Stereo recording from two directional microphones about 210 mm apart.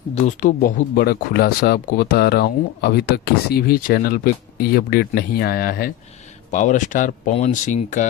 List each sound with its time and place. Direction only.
0.1 s speech: 35° left (ahead or behind)